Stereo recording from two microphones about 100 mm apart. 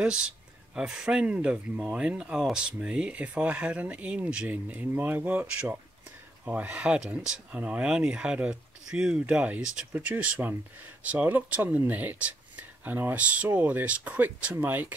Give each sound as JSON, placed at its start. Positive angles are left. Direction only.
{"t": 0.0, "sound": "speech", "side_deg": -10}